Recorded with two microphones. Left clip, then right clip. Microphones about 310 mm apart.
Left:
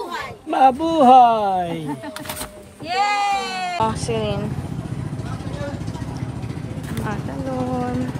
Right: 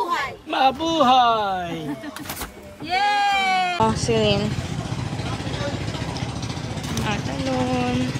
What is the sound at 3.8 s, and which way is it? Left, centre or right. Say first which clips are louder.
Speech: right 2 dB; centre.